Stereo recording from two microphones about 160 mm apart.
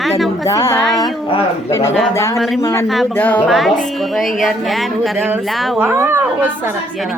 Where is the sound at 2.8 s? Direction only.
Centre (ahead or behind).